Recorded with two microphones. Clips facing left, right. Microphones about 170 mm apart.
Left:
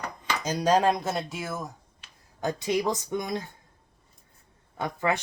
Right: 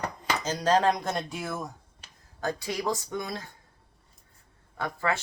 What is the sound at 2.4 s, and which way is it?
Speech, 20° left (ahead or behind).